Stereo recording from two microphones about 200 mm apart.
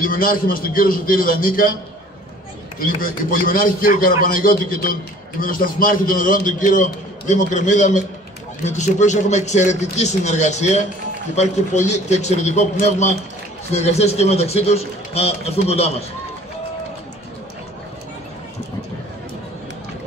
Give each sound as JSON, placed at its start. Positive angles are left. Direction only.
{"t": 0.0, "sound": "a man's voice", "side_deg": 45}
{"t": 3.0, "sound": "a man's voice", "side_deg": 45}